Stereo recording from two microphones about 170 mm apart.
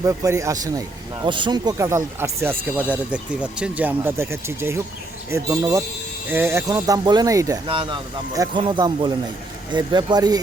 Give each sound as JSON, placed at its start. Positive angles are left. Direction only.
{"t": 0.0, "sound": "speech", "side_deg": -20}